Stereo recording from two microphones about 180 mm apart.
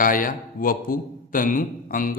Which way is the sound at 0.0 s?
50° left (ahead or behind).